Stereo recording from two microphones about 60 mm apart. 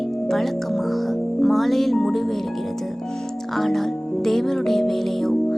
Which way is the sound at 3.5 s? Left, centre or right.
Centre.